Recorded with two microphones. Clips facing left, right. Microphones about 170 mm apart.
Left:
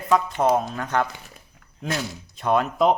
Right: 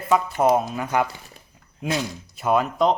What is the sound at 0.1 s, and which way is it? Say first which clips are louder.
Speech: right 1 dB; 10° right (ahead or behind).